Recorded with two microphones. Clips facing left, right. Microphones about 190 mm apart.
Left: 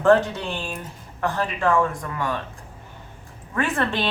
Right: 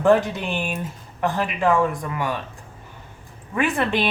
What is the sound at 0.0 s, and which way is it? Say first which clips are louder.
A woman's voice: even; 15° right (ahead or behind).